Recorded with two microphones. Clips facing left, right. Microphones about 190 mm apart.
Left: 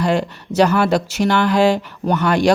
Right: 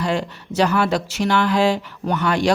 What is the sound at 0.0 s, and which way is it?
Speech, 45° left (ahead or behind).